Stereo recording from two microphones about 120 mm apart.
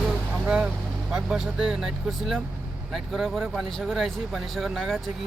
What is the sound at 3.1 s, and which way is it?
Speech, centre (ahead or behind).